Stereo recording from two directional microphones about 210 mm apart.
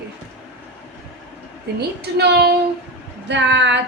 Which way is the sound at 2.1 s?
50° right (ahead or behind).